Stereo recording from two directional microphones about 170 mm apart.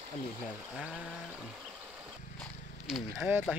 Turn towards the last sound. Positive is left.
turn(degrees=-5)  # may be behind; listen again after turning